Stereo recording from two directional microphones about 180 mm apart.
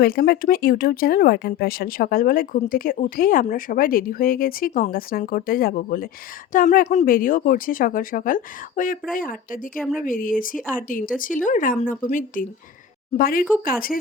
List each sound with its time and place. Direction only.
0.0 s speech: 60° left (ahead or behind)
9.7 s speech: centre (ahead or behind)
10.0 s speech: 50° left (ahead or behind)